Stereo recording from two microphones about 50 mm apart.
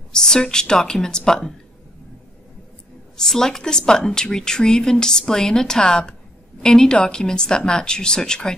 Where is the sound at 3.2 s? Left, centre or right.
Centre.